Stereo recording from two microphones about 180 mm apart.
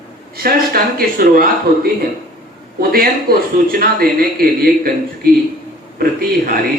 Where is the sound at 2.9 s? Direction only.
55° right (ahead or behind).